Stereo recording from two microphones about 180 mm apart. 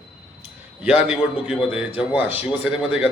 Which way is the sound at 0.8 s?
5° right (ahead or behind).